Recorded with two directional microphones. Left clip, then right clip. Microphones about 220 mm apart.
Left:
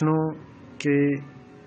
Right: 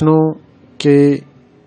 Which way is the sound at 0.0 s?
45° right (ahead or behind).